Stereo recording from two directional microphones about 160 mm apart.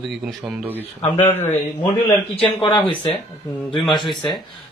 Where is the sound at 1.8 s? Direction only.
30° left (ahead or behind).